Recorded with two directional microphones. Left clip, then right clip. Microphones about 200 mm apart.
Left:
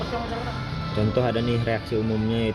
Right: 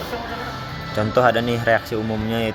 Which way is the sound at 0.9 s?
5° right (ahead or behind).